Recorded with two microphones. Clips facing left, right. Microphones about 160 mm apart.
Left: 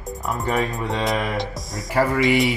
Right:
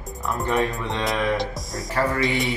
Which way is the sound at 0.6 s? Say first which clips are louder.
Left 1 dB; 15° left (ahead or behind).